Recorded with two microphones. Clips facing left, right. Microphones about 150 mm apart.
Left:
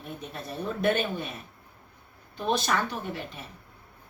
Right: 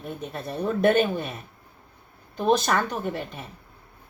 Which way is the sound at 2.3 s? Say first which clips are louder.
Right 5 dB; 45° right (ahead or behind).